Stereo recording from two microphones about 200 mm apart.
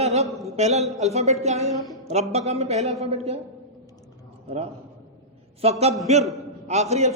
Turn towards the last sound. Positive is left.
turn(degrees=-35)  # may be behind; listen again after turning